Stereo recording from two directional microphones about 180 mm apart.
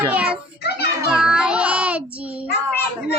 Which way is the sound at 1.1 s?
5° right (ahead or behind).